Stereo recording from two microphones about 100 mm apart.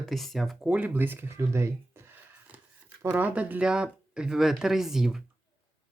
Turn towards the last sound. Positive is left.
turn(degrees=-5)  # may be behind; listen again after turning